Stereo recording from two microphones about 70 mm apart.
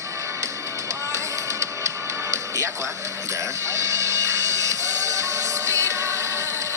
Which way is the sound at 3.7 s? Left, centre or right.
Right.